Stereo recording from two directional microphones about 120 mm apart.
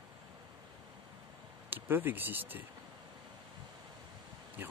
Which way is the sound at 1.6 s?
15° right (ahead or behind).